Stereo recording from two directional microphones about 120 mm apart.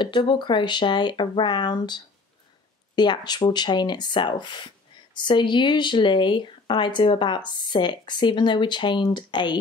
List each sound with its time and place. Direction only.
0.0 s speech: 40° left (ahead or behind)